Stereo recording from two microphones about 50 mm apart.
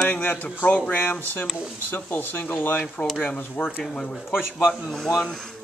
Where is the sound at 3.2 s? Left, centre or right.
Left.